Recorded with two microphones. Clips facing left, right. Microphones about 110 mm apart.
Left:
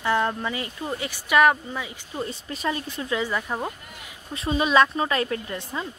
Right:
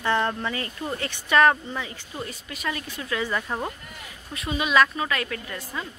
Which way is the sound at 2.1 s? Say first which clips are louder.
Left 6 dB; 25° left (ahead or behind).